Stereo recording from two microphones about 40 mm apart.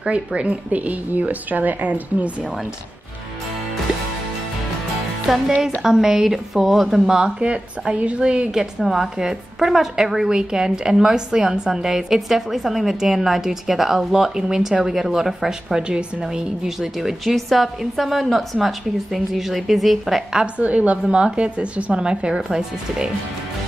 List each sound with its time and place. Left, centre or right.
0.0 s a woman's voice: right
5.3 s a woman's voice: centre
7.1 s a woman's voice: centre
7.3 s a woman's voice: right
8.7 s a woman's voice: centre
17.2 s a woman's voice: centre
20.5 s a woman's voice: right